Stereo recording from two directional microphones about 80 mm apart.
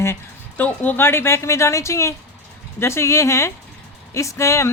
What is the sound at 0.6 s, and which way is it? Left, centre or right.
A woman's voice, left.